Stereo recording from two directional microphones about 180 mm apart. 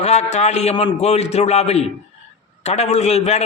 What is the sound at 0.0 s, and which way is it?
A man's voice, 35° left (ahead or behind).